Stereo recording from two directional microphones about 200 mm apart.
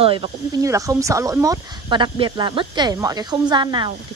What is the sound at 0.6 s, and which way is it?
Speech, 15° right (ahead or behind).